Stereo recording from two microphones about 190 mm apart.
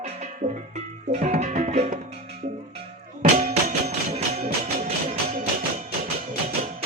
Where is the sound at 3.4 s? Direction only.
35° right (ahead or behind).